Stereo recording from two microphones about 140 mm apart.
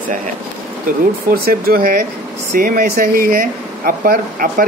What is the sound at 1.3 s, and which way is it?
Speech, 90° right.